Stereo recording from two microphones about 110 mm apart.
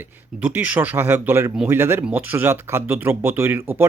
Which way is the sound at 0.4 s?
15° right (ahead or behind).